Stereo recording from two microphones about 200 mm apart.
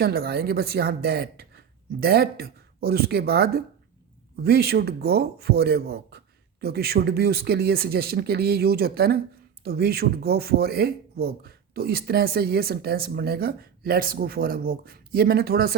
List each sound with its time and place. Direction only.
0.0 s speech: 50° right (ahead or behind)